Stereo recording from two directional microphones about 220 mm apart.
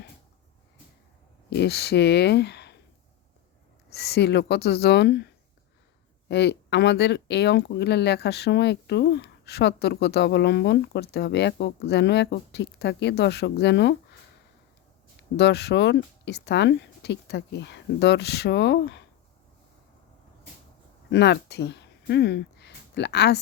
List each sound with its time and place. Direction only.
1.5 s speech: 50° left (ahead or behind)
3.8 s speech: 45° left (ahead or behind)
6.2 s speech: 50° left (ahead or behind)
15.4 s speech: 50° left (ahead or behind)
21.1 s speech: 50° left (ahead or behind)